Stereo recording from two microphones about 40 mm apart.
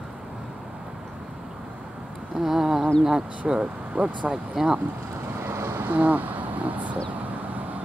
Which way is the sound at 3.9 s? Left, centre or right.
Right.